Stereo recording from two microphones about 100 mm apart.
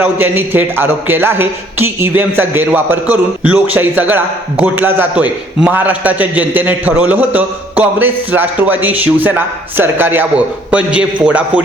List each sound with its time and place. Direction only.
0.0 s a man's voice: 20° right (ahead or behind)